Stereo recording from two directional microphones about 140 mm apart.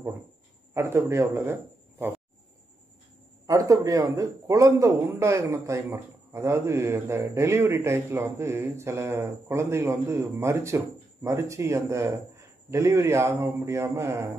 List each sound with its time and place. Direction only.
0.7 s a man's voice: 20° right (ahead or behind)
3.4 s a man's voice: 25° right (ahead or behind)